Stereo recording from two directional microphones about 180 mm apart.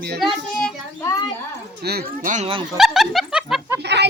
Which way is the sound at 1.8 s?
60° right (ahead or behind).